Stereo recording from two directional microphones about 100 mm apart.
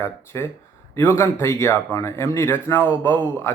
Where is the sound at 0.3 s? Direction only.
30° left (ahead or behind).